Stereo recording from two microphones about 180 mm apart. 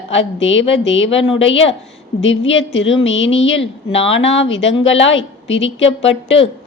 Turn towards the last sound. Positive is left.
turn(degrees=90)